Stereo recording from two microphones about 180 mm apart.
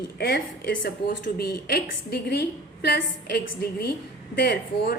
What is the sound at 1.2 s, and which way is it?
A woman's voice, 60° left (ahead or behind).